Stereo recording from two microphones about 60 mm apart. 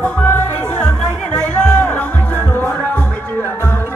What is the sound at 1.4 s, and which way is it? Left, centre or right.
Music, centre.